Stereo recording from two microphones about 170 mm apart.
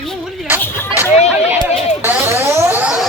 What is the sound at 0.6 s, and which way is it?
Speech, 15° left (ahead or behind).